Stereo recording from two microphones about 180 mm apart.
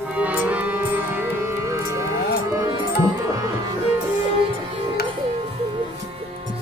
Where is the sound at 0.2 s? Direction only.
10° right (ahead or behind).